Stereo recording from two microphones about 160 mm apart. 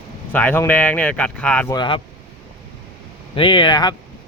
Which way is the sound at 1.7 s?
30° left (ahead or behind).